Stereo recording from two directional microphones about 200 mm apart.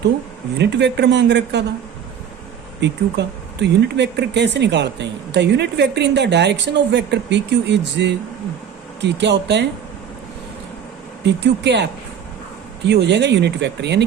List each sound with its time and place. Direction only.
0.6 s speech: 60° right (ahead or behind)
2.8 s speech: 60° right (ahead or behind)
11.2 s speech: 60° right (ahead or behind)